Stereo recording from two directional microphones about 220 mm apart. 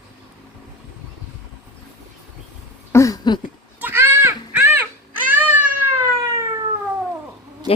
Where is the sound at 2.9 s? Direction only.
15° left (ahead or behind).